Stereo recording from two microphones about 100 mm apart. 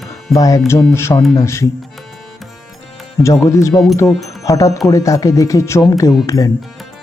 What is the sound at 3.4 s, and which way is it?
Speech, 30° left (ahead or behind).